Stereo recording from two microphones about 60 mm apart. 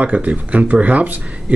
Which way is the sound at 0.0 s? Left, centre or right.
Right.